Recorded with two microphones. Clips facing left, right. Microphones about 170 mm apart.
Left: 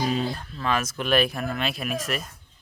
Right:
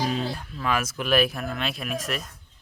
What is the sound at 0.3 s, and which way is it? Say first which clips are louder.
Speech: even; 10° right (ahead or behind).